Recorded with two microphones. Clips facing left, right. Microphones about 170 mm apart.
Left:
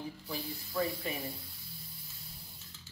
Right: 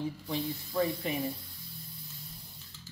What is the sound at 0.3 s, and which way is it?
Speech, 25° right (ahead or behind).